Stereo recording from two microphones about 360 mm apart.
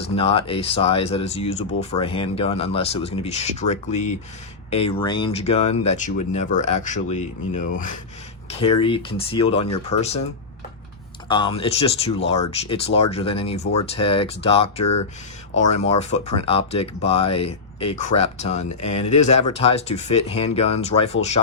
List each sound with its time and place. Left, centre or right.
0.0 s speech: centre
11.3 s speech: centre